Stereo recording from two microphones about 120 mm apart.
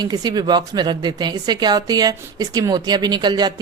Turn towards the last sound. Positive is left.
turn(degrees=-35)  # may be behind; listen again after turning